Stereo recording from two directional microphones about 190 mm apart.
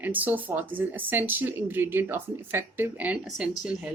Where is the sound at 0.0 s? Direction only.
10° right (ahead or behind).